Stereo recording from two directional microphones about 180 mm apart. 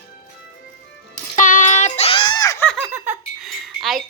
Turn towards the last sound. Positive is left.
turn(degrees=0)  # may be behind; listen again after turning